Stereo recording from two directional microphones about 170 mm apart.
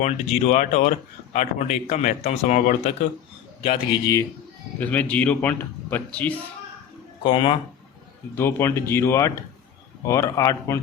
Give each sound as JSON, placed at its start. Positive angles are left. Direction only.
{"t": 0.0, "sound": "speech", "side_deg": 45}
{"t": 4.0, "sound": "a man's voice", "side_deg": 20}
{"t": 7.3, "sound": "speech", "side_deg": 30}
{"t": 8.4, "sound": "a man's voice", "side_deg": 15}